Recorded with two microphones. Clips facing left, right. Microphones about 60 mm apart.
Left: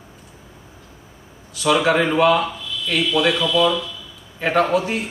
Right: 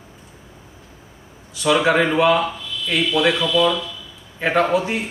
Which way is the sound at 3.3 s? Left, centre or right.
Centre.